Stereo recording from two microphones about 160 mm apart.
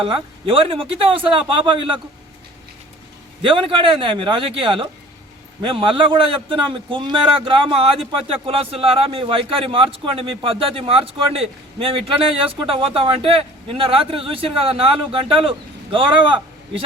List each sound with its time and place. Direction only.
0.0 s a man's voice: 35° right (ahead or behind)
3.4 s a man's voice: 30° right (ahead or behind)